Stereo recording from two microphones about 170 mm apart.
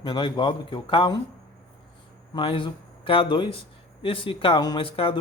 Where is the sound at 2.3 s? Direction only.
30° left (ahead or behind).